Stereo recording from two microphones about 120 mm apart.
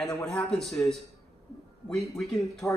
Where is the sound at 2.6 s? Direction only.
25° left (ahead or behind).